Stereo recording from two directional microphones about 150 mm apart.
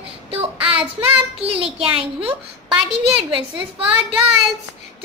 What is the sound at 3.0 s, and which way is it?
Child singing, 35° right (ahead or behind).